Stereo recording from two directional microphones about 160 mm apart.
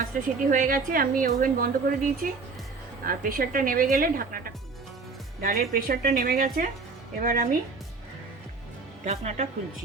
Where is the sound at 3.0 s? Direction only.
65° right (ahead or behind).